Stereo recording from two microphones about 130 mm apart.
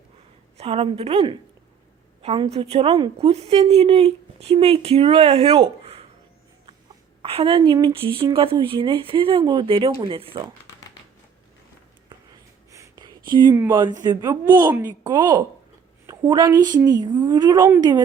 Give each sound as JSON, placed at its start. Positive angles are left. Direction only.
{"t": 0.5, "sound": "a woman's voice", "side_deg": -50}
{"t": 7.2, "sound": "a woman's voice", "side_deg": -45}
{"t": 12.7, "sound": "a sound", "side_deg": -25}
{"t": 13.7, "sound": "a woman's voice", "side_deg": -35}